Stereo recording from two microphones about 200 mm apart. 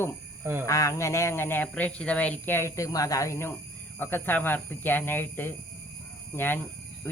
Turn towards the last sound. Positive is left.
turn(degrees=10)  # may be behind; listen again after turning